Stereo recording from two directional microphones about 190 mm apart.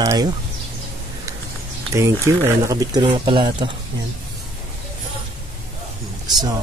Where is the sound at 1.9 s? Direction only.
15° right (ahead or behind).